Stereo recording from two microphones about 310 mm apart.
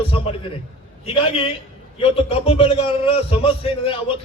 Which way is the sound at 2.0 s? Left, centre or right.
Centre.